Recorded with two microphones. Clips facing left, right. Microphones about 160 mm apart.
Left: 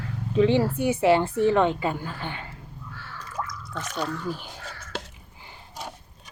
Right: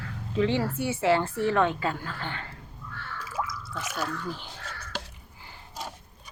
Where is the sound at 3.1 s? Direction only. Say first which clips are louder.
Right 1 dB; 5° right (ahead or behind).